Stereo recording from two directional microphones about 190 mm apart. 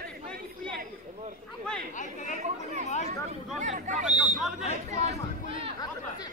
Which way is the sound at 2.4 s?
40° right (ahead or behind).